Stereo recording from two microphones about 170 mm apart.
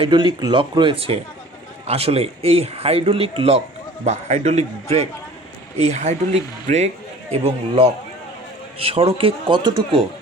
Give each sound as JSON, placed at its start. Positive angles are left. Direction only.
{"t": 0.0, "sound": "a man's voice", "side_deg": -30}